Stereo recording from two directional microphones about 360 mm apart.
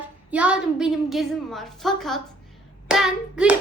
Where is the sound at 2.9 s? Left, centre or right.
Centre.